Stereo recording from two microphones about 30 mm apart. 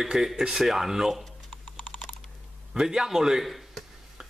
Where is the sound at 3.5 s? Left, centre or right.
Centre.